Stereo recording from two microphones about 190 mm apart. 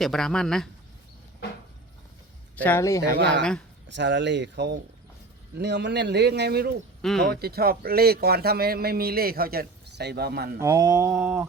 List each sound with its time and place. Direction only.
0.0 s speech: centre (ahead or behind)
2.6 s speech: 15° left (ahead or behind)
3.8 s a man's voice: 70° right (ahead or behind)
7.0 s speech: centre (ahead or behind)
7.3 s a man's voice: 55° right (ahead or behind)
10.6 s a sound: 20° right (ahead or behind)